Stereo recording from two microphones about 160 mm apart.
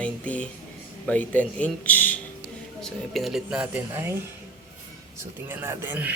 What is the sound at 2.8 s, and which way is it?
Speech, centre (ahead or behind).